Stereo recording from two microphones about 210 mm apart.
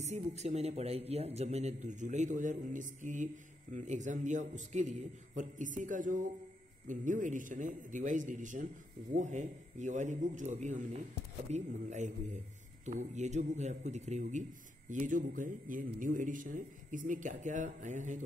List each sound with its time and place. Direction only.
0.0 s speech: 30° right (ahead or behind)